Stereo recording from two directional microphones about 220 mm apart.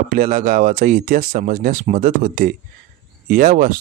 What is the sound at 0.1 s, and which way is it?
Speech, 35° right (ahead or behind).